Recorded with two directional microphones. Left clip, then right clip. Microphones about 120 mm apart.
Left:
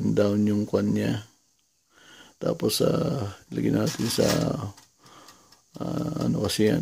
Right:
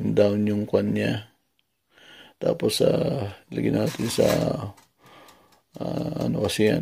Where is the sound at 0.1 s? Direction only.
20° left (ahead or behind).